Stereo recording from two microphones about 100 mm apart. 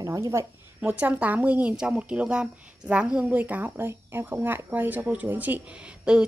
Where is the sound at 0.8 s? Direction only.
15° right (ahead or behind).